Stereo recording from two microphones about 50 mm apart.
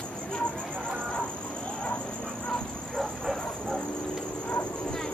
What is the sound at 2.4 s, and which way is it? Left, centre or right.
Dog, centre.